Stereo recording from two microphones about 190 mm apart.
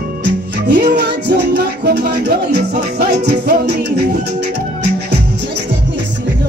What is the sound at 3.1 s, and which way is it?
Music, 60° right (ahead or behind).